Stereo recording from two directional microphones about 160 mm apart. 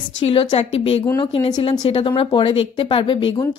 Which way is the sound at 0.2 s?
35° left (ahead or behind).